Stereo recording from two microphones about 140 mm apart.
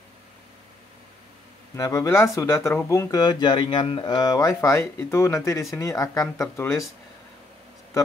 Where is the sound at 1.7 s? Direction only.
20° left (ahead or behind).